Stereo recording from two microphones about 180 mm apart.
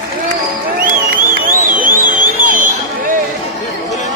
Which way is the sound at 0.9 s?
50° right (ahead or behind).